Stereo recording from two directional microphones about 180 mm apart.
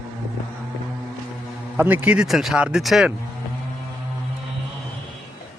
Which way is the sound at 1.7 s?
10° right (ahead or behind).